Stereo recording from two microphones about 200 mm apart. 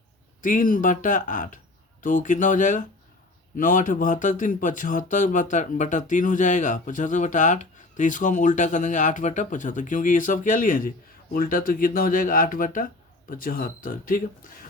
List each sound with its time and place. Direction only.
0.4 s speech: 40° left (ahead or behind)